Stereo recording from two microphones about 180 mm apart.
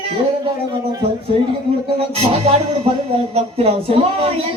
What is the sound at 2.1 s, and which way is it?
Speech, 35° right (ahead or behind).